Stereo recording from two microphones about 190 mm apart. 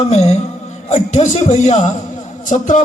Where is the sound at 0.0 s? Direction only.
35° left (ahead or behind).